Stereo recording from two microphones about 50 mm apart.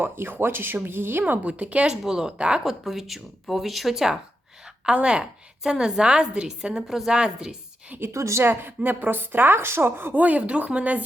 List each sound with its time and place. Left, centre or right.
0.0 s a woman's voice: right
1.2 s speech: right
2.0 s a woman's voice: centre
2.6 s a woman's voice: centre
8.1 s a woman's voice: right
8.4 s a woman's voice: right
10.2 s speech: right